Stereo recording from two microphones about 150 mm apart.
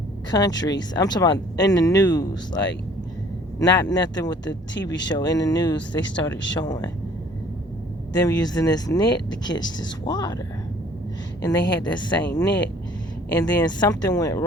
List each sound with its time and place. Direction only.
0.3 s speech: 25° left (ahead or behind)
3.8 s speech: 25° left (ahead or behind)
8.1 s speech: 25° left (ahead or behind)
11.4 s speech: 25° left (ahead or behind)
12.2 s speech: 20° left (ahead or behind)
13.6 s speech: 30° left (ahead or behind)